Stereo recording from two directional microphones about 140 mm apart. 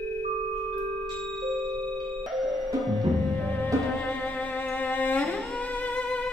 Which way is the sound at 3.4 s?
10° left (ahead or behind).